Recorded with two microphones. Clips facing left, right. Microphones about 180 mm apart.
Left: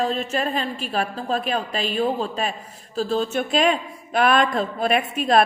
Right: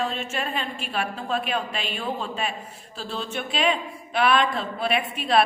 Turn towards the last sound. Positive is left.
turn(degrees=45)  # may be behind; listen again after turning